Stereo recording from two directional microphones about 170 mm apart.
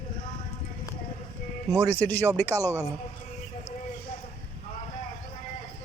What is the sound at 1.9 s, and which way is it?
Speech, 10° left (ahead or behind).